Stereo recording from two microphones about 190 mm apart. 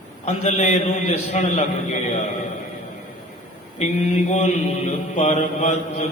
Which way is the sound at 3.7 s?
35° left (ahead or behind).